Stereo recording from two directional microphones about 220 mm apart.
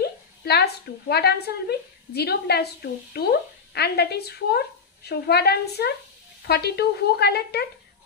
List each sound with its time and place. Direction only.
0.0 s a woman's voice: 45° left (ahead or behind)